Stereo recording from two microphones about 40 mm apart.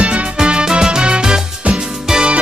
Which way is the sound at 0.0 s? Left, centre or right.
Right.